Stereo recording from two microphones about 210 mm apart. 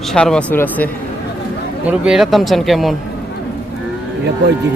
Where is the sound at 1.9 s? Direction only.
5° right (ahead or behind).